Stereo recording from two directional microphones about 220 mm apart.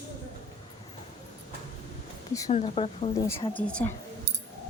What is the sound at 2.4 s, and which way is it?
Speech, 30° left (ahead or behind).